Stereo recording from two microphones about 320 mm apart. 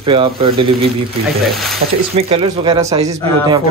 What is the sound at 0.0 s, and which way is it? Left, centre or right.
Speech, centre.